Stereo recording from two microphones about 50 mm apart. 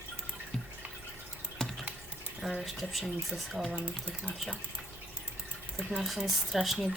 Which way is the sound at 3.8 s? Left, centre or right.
Right.